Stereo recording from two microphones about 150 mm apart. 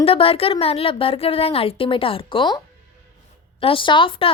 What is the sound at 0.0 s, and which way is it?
A woman's voice, 40° left (ahead or behind).